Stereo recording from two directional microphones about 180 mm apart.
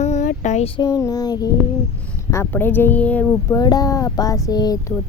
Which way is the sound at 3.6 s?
20° left (ahead or behind).